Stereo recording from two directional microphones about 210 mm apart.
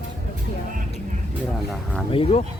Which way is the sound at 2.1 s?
30° left (ahead or behind).